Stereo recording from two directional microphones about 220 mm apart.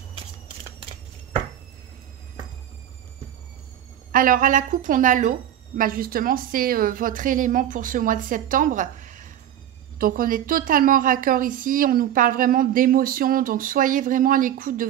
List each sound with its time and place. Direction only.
4.1 s a woman's voice: 40° right (ahead or behind)